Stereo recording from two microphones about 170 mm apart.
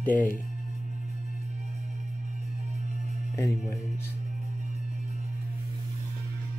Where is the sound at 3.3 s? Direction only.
15° left (ahead or behind).